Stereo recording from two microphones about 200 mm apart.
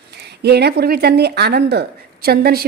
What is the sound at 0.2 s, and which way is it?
Speech, 55° right (ahead or behind).